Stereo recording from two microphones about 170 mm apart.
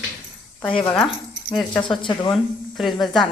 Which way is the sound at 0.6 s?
30° left (ahead or behind).